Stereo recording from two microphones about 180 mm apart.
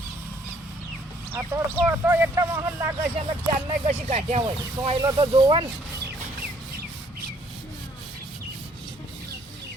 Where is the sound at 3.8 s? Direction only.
40° right (ahead or behind).